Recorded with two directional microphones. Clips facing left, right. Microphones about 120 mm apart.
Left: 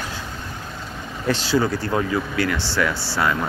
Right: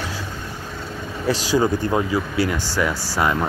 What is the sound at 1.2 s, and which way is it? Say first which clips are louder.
Speech: right 1 dB; 15° right (ahead or behind).